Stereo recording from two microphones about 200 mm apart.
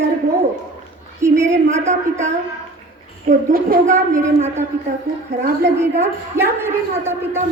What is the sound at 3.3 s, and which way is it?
Speech, 45° right (ahead or behind).